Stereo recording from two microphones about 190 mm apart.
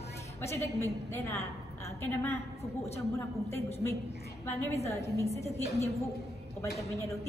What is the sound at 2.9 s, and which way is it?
Speech, 15° left (ahead or behind).